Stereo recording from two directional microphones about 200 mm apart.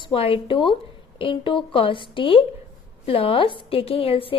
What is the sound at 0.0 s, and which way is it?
A woman's voice, 25° left (ahead or behind).